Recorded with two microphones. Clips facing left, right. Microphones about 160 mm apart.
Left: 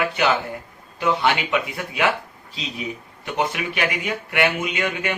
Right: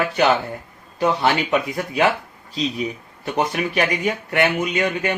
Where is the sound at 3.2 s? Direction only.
40° right (ahead or behind).